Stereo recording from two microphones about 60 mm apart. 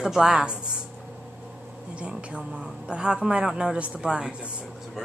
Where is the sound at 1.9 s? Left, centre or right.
Centre.